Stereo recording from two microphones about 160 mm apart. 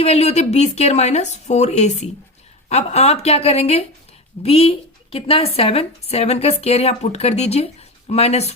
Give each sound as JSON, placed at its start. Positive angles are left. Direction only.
{"t": 0.0, "sound": "a woman's voice", "side_deg": 40}